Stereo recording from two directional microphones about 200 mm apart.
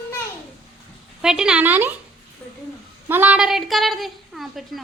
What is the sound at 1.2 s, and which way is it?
Speech, 5° right (ahead or behind).